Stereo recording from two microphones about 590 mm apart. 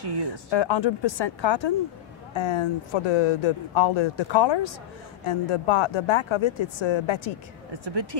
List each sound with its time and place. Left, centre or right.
0.0 s speech: right
0.5 s speech: left
7.7 s speech: right